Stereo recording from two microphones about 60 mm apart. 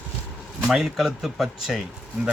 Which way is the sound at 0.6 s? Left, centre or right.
Centre.